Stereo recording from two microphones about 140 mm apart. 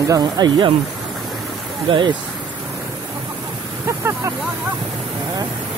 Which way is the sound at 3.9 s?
20° right (ahead or behind).